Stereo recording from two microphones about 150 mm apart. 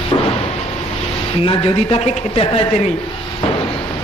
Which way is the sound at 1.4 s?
40° left (ahead or behind).